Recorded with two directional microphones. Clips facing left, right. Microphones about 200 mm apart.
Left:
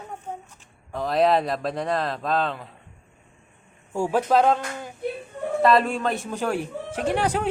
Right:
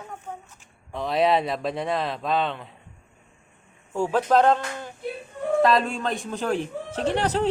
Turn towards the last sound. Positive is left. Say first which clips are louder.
# even
turn(degrees=10)  # may be behind; listen again after turning